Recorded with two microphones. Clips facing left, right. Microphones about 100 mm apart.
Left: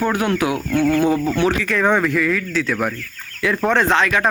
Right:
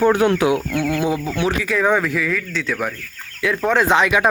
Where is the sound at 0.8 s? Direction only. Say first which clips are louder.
Left 4 dB; 5° right (ahead or behind).